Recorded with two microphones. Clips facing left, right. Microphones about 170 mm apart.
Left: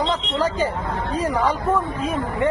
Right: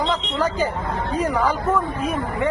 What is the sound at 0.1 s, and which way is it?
Speech, 30° left (ahead or behind).